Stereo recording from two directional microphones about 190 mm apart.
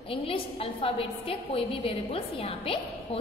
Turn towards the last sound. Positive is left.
turn(degrees=30)  # may be behind; listen again after turning